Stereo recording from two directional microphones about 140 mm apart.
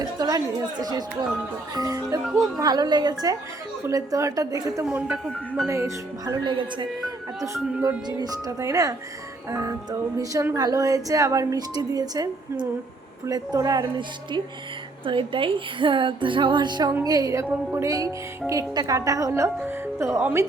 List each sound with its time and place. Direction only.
0.0 s speech: 25° right (ahead or behind)
1.7 s music: 25° right (ahead or behind)
4.9 s speech: 10° right (ahead or behind)
5.2 s music: centre (ahead or behind)
5.6 s music: 20° right (ahead or behind)
7.4 s music: 20° right (ahead or behind)
15.0 s speech: 40° right (ahead or behind)
16.9 s music: 25° right (ahead or behind)